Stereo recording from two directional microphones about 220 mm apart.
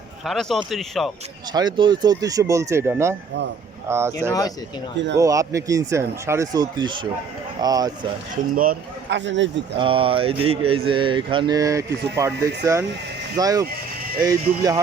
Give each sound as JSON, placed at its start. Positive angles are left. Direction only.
{"t": 0.3, "sound": "speech", "side_deg": 0}
{"t": 1.5, "sound": "speech", "side_deg": -20}
{"t": 4.3, "sound": "speech", "side_deg": 15}
{"t": 4.9, "sound": "a man's voice", "side_deg": -55}
{"t": 5.2, "sound": "speech", "side_deg": -15}
{"t": 8.5, "sound": "a man's voice", "side_deg": -45}
{"t": 9.7, "sound": "speech", "side_deg": -25}